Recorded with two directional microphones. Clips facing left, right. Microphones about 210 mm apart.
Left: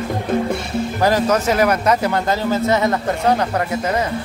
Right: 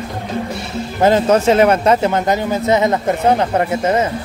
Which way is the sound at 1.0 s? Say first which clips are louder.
Right 5 dB; 25° right (ahead or behind).